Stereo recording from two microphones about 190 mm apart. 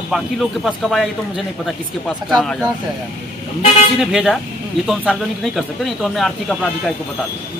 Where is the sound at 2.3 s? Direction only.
Centre (ahead or behind).